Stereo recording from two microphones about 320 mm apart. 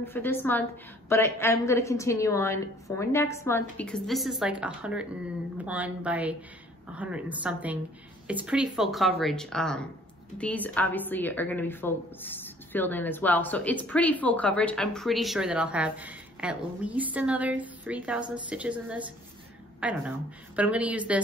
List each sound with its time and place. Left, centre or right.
0.0 s a woman's voice: centre